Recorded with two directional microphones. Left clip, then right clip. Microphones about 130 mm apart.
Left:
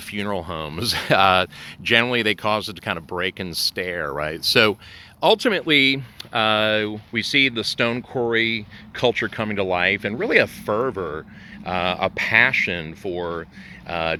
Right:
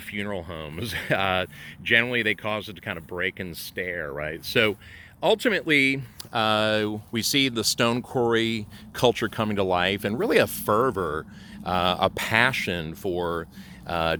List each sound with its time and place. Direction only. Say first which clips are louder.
0.1 s speech: left 5 dB; 35° left (ahead or behind)
5.2 s speech: left 4 dB; 20° left (ahead or behind)
6.3 s speech: left 4 dB; centre (ahead or behind); by 14.2 s 25° right (ahead or behind)